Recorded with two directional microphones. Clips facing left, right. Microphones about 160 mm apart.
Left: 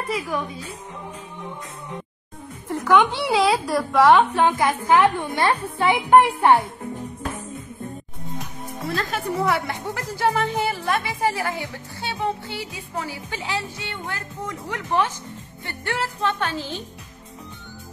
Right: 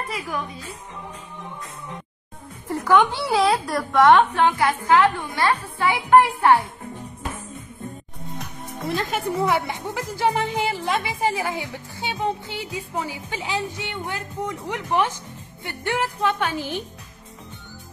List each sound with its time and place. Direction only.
2.7 s a woman's voice: centre (ahead or behind)
4.4 s a woman's voice: 15° left (ahead or behind)
8.4 s music: centre (ahead or behind)
8.8 s a woman's voice: 20° right (ahead or behind)